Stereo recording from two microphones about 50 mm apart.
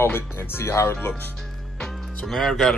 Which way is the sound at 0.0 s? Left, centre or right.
Left.